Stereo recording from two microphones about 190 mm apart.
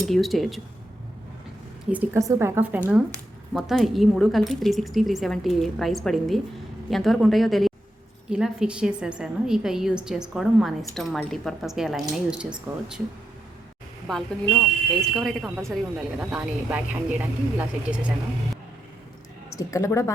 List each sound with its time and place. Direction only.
0.1 s a woman's voice: centre (ahead or behind)
1.9 s speech: 10° right (ahead or behind)
3.5 s a woman's voice: centre (ahead or behind)
14.1 s a woman's voice: centre (ahead or behind)
19.5 s speech: 15° left (ahead or behind)